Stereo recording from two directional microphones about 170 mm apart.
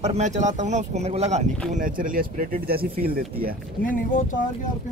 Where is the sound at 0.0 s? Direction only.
40° right (ahead or behind).